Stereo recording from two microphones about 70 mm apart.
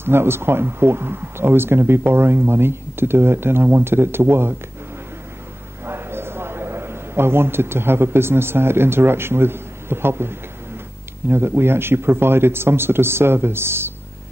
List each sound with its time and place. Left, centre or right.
0.0 s a man's voice: right
5.9 s a man's voice: right